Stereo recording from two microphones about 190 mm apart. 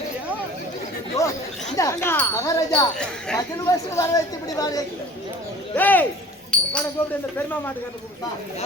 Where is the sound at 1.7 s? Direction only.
15° left (ahead or behind).